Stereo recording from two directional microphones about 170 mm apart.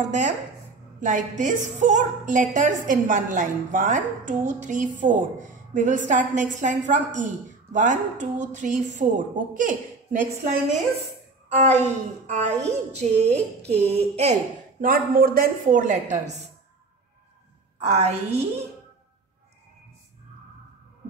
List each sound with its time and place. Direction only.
0.0 s a woman's voice: 45° right (ahead or behind)
11.4 s a woman's voice: 40° right (ahead or behind)
14.8 s a woman's voice: 60° right (ahead or behind)
17.7 s a woman's voice: 40° right (ahead or behind)